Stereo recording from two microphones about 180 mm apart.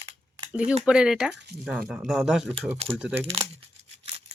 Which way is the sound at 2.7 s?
35° right (ahead or behind).